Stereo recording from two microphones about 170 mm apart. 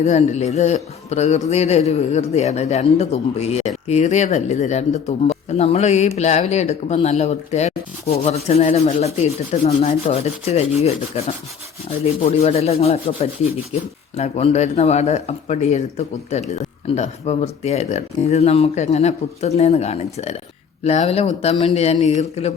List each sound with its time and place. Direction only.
0.0 s a man's voice: 40° left (ahead or behind)
12.2 s a man's voice: 35° left (ahead or behind)